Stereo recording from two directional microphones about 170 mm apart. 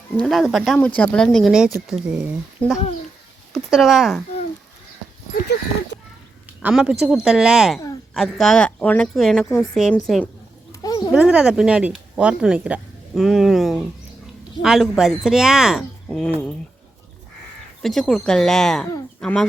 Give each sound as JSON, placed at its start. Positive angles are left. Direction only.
{"t": 0.2, "sound": "speech", "side_deg": 0}
{"t": 5.3, "sound": "speech", "side_deg": 75}
{"t": 6.6, "sound": "speech", "side_deg": -5}
{"t": 10.7, "sound": "a sound", "side_deg": 20}
{"t": 11.1, "sound": "speech", "side_deg": -5}
{"t": 17.8, "sound": "speech", "side_deg": 5}